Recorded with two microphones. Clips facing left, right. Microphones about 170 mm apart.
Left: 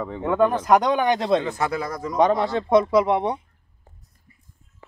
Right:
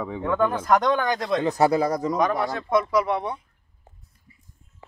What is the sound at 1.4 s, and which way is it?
Speech, 35° right (ahead or behind).